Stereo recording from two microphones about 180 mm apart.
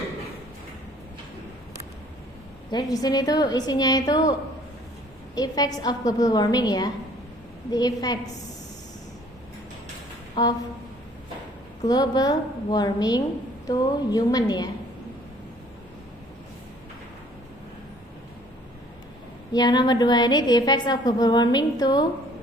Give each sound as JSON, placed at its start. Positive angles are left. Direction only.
{"t": 2.6, "sound": "a woman's voice", "side_deg": 20}
{"t": 10.4, "sound": "a woman's voice", "side_deg": 25}
{"t": 11.8, "sound": "a woman's voice", "side_deg": 20}
{"t": 19.5, "sound": "a woman's voice", "side_deg": 25}